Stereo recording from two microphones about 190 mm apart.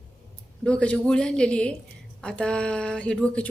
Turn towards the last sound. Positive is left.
turn(degrees=5)  # may be behind; listen again after turning